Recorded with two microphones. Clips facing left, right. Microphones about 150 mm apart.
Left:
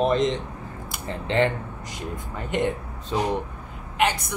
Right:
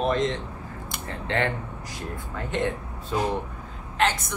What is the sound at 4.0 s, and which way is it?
Speech, 15° left (ahead or behind).